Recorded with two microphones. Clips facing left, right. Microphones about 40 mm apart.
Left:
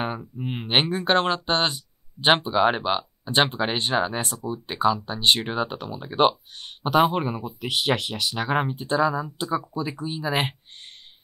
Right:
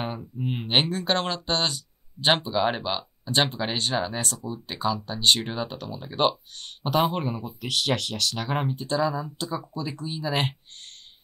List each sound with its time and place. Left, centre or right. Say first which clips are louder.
0.0 s speech: left 2 dB; centre